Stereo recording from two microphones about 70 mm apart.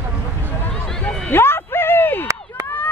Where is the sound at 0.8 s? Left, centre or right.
Centre.